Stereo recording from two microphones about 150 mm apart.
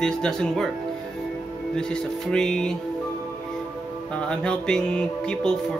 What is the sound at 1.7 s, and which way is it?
Music, 5° left (ahead or behind).